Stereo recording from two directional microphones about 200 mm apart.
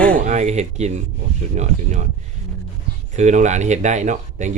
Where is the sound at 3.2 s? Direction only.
35° right (ahead or behind).